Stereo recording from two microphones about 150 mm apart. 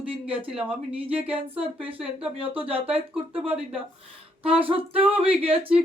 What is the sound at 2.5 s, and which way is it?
A woman's voice, 40° right (ahead or behind).